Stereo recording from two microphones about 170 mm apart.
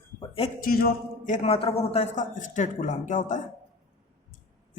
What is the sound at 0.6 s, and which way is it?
Speech, 60° left (ahead or behind).